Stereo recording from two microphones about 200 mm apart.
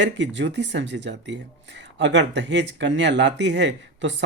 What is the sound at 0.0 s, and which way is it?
Speech, 65° right (ahead or behind).